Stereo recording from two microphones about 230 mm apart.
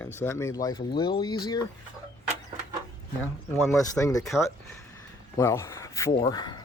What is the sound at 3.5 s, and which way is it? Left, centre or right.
Speech, centre.